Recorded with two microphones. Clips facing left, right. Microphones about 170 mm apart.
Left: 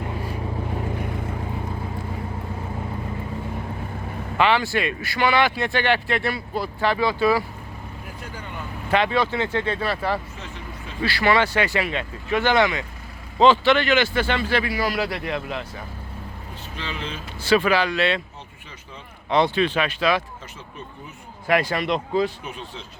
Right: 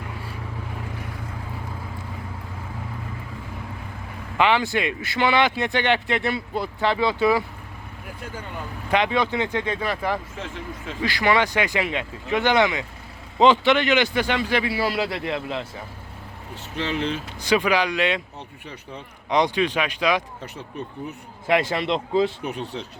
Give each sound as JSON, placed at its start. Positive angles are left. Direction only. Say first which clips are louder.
{"t": 0.0, "sound": "vehicle", "louder": "left 6 dB", "side_deg": 25}
{"t": 4.4, "sound": "speech", "louder": "even", "side_deg": -15}
{"t": 8.9, "sound": "speech", "louder": "left 1 dB", "side_deg": -15}
{"t": 10.3, "sound": "speech", "louder": "right 4 dB", "side_deg": -90}
{"t": 11.0, "sound": "speech", "louder": "left 1 dB", "side_deg": -15}
{"t": 14.7, "sound": "speech", "louder": "even", "side_deg": -25}
{"t": 16.7, "sound": "speech", "louder": "right 7 dB", "side_deg": -70}
{"t": 17.4, "sound": "speech", "louder": "left 2 dB", "side_deg": -15}
{"t": 19.3, "sound": "speech", "louder": "left 1 dB", "side_deg": -15}
{"t": 21.4, "sound": "speech", "louder": "even", "side_deg": -25}
{"t": 22.4, "sound": "speech", "louder": "right 6 dB", "side_deg": -65}